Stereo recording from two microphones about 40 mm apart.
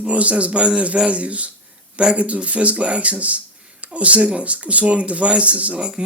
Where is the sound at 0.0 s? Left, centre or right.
Right.